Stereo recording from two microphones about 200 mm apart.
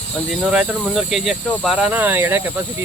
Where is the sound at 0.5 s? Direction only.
5° right (ahead or behind).